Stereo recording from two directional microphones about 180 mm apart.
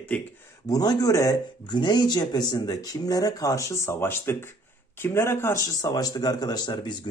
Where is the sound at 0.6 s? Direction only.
20° left (ahead or behind).